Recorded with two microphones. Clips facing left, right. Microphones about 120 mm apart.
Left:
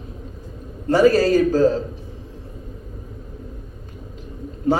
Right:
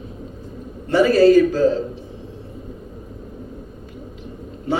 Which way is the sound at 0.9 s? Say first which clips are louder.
Right 2 dB; 40° left (ahead or behind).